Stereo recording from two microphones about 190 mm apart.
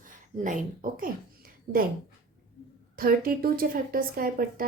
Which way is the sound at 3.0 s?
50° right (ahead or behind).